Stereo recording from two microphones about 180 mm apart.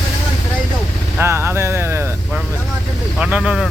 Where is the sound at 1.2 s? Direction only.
15° right (ahead or behind).